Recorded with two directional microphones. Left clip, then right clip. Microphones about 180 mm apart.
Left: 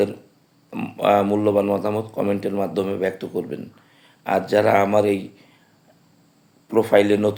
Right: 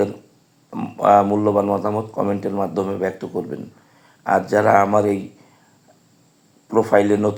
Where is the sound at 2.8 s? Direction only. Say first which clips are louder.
Right 1 dB; 15° left (ahead or behind).